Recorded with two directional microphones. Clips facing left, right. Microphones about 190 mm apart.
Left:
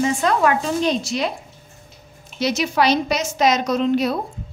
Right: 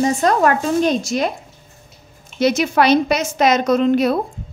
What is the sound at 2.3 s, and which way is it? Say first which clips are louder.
A woman's voice: right 4 dB; 55° right (ahead or behind).